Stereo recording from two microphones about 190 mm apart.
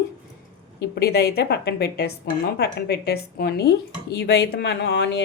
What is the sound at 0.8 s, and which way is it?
Speech, 55° left (ahead or behind).